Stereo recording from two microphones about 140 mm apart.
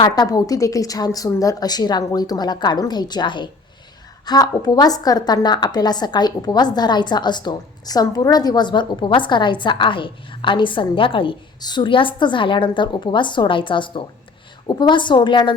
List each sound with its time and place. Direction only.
0.0 s a woman's voice: 30° left (ahead or behind)